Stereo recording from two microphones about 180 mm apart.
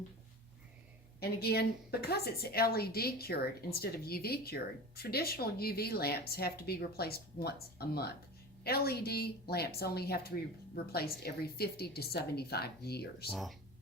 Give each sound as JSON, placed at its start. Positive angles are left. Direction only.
{"t": 1.2, "sound": "speech", "side_deg": 60}
{"t": 13.3, "sound": "speech", "side_deg": 0}